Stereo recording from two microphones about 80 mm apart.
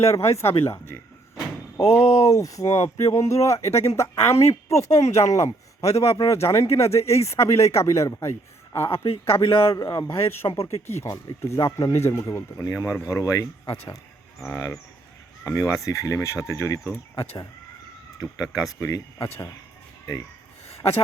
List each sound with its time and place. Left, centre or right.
0.0 s speech: left
9.4 s speech: left
9.7 s speech: left
11.6 s speech: left
11.9 s speech: left
15.4 s speech: left
18.5 s speech: left